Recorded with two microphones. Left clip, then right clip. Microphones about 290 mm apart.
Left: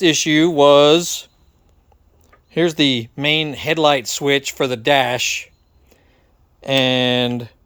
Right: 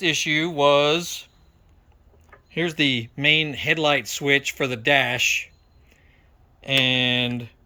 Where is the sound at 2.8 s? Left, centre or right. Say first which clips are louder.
Left 2 dB; left.